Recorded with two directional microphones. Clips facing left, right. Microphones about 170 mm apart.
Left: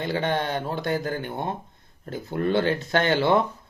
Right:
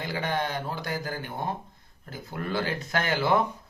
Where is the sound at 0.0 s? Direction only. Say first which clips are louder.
Left 4 dB; 25° left (ahead or behind).